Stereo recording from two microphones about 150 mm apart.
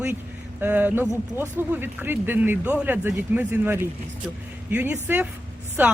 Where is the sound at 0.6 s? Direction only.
10° right (ahead or behind).